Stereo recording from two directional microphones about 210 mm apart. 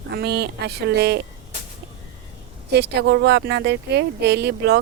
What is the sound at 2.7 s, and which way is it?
Speech, 50° right (ahead or behind).